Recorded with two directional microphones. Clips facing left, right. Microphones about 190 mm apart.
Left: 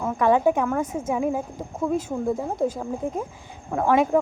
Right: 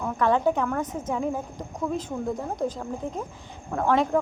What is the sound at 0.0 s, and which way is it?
Speech, 10° left (ahead or behind).